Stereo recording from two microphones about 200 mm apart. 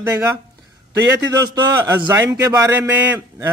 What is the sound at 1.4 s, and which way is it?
A man's voice, 20° right (ahead or behind).